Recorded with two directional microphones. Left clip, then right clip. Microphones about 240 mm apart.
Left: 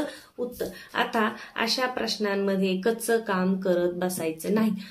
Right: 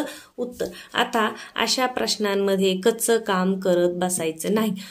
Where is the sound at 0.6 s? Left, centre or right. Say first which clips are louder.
Right 5 dB; right.